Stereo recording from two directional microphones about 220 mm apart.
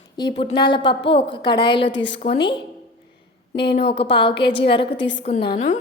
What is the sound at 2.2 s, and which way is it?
Speech, 25° left (ahead or behind).